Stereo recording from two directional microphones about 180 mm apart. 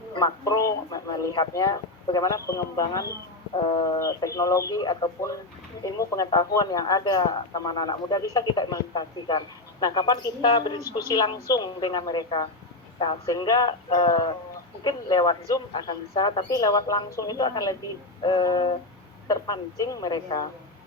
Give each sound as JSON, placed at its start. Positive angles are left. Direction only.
{"t": 0.1, "sound": "speech", "side_deg": 20}